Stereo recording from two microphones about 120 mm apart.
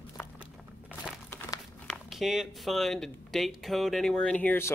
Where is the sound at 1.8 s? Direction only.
Centre (ahead or behind).